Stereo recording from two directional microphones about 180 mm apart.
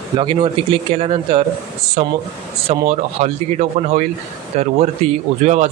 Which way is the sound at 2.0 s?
45° right (ahead or behind).